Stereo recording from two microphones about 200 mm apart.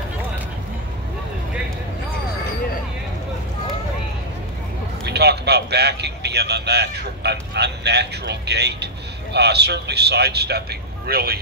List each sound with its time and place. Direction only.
5.0 s a man's voice: 55° right (ahead or behind)